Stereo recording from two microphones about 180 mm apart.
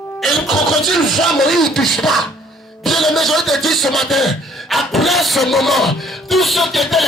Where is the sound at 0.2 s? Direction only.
Centre (ahead or behind).